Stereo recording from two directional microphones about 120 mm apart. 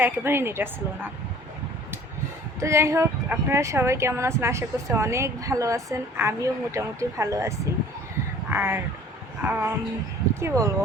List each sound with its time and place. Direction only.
0.0 s speech: 20° right (ahead or behind)
2.6 s speech: 25° right (ahead or behind)
8.4 s a sound: 20° right (ahead or behind)
10.4 s speech: 25° right (ahead or behind)